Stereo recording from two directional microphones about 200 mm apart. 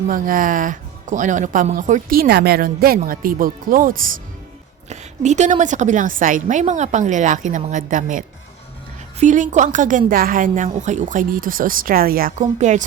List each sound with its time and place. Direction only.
0.1 s a woman's voice: 45° right (ahead or behind)